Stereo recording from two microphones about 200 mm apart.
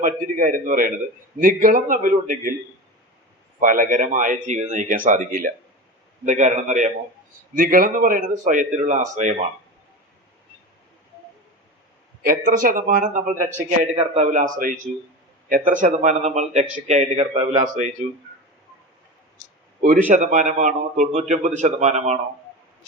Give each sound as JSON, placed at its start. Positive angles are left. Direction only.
{"t": 0.0, "sound": "a man's voice", "side_deg": -40}
{"t": 3.6, "sound": "a man's voice", "side_deg": -40}
{"t": 12.2, "sound": "a man's voice", "side_deg": -45}
{"t": 20.1, "sound": "a man's voice", "side_deg": -35}